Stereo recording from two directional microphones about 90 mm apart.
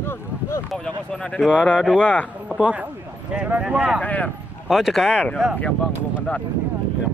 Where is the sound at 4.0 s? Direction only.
15° left (ahead or behind).